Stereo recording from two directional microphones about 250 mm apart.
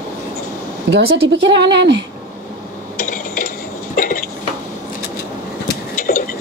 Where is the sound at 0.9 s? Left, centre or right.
Right.